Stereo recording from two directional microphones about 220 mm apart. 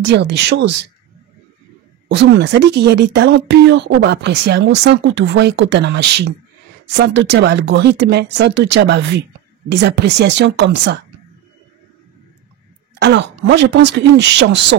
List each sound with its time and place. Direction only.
0.0 s speech: 50° right (ahead or behind)
2.1 s speech: 50° right (ahead or behind)
13.0 s speech: 50° right (ahead or behind)